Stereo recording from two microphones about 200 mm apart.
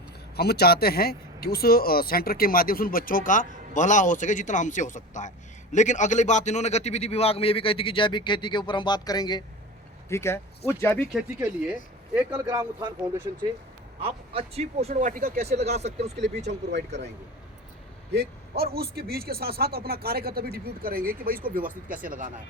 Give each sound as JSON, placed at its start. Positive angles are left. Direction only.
{"t": 0.3, "sound": "a man's voice", "side_deg": 50}
{"t": 11.1, "sound": "a man's voice", "side_deg": -5}
{"t": 16.1, "sound": "speech", "side_deg": -60}
{"t": 18.1, "sound": "a man's voice", "side_deg": -55}